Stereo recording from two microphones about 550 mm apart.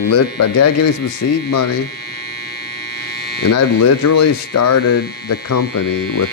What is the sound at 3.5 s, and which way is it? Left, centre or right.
Speech, left.